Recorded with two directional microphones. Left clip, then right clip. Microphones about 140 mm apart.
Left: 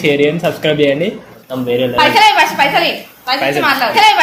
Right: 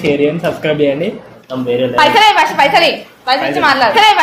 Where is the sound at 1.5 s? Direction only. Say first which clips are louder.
Even; 15° left (ahead or behind).